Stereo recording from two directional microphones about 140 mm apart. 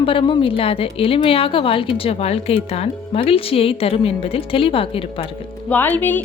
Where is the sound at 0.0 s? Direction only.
40° left (ahead or behind).